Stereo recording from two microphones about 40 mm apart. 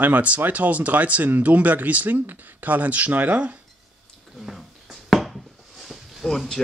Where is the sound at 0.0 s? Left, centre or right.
Right.